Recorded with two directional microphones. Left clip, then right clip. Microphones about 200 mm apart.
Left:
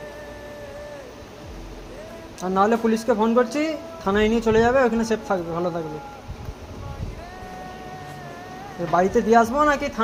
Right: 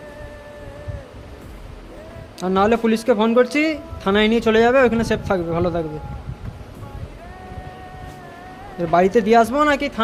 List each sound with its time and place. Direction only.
2.5 s a man's voice: 45° right (ahead or behind)
8.9 s a man's voice: 50° right (ahead or behind)